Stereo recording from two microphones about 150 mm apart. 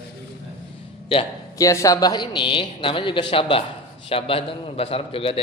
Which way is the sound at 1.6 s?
20° left (ahead or behind).